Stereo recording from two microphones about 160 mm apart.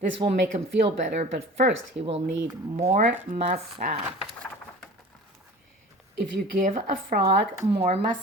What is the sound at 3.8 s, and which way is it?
Speech, 65° right (ahead or behind).